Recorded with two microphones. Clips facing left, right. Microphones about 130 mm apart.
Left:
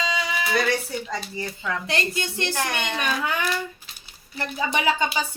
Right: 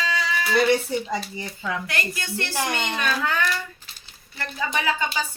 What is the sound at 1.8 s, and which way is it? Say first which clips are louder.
A child's voice: left 3 dB; 25° left (ahead or behind).